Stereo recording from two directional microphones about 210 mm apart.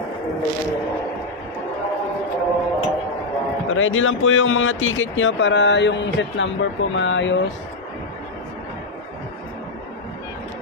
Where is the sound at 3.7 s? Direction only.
70° left (ahead or behind).